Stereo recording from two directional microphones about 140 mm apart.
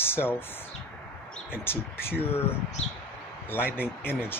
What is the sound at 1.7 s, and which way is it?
Speech, 15° left (ahead or behind).